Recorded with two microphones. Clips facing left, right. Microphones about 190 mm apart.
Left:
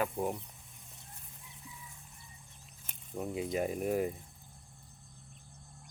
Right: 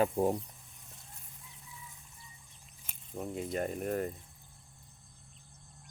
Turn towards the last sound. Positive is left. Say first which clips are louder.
# left 2 dB
turn(degrees=5)  # may be behind; listen again after turning